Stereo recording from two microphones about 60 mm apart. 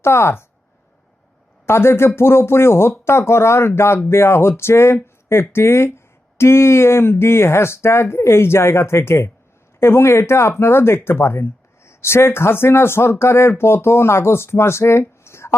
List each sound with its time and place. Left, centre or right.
0.0 s speech: left
1.6 s speech: left